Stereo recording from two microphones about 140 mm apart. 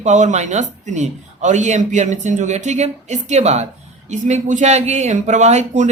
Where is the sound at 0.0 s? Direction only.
60° right (ahead or behind).